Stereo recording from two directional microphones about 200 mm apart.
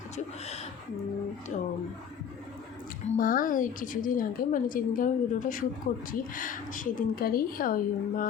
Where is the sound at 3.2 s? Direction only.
45° left (ahead or behind).